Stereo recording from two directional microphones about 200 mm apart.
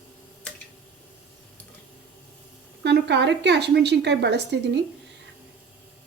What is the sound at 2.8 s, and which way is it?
Speech, 60° right (ahead or behind).